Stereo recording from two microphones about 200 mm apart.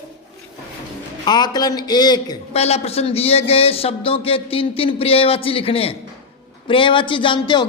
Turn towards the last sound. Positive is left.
turn(degrees=25)  # may be behind; listen again after turning